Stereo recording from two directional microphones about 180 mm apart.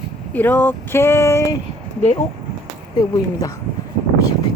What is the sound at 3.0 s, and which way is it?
Speech, 20° left (ahead or behind).